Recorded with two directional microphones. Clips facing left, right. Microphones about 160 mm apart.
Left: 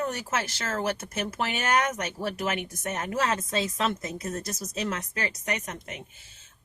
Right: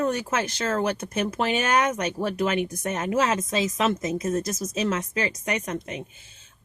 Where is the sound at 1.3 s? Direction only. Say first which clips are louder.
Right 3 dB; 30° right (ahead or behind).